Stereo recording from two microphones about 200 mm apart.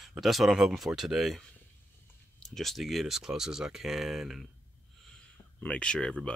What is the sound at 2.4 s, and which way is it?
Speech, centre (ahead or behind).